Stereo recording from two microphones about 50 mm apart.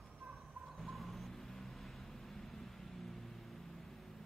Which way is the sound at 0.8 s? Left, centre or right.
Centre.